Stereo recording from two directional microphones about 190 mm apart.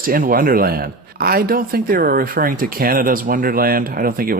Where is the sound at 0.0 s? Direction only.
50° right (ahead or behind).